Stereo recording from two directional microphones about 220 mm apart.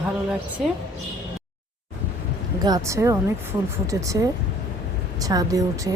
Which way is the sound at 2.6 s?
15° right (ahead or behind).